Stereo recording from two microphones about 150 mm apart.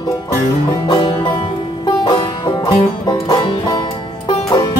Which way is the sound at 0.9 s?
30° left (ahead or behind).